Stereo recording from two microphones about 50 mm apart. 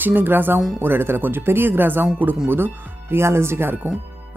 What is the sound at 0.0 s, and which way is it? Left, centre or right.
Speech, right.